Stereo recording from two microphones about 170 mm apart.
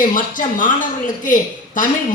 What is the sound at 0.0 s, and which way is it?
A woman's voice, 50° left (ahead or behind).